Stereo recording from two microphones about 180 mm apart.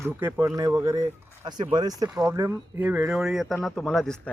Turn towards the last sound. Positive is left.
turn(degrees=5)  # may be behind; listen again after turning